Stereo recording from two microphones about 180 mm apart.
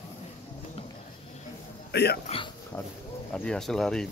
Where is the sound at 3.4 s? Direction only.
5° left (ahead or behind).